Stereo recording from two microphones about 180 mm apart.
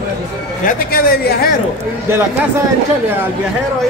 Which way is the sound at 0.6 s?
55° left (ahead or behind).